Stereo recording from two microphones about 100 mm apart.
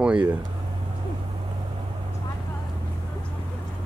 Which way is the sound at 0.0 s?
10° right (ahead or behind).